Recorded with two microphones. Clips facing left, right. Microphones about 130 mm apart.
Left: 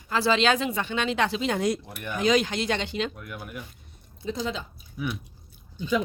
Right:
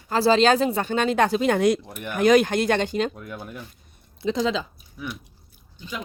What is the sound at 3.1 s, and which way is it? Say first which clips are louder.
Speech: right 3 dB; 30° right (ahead or behind).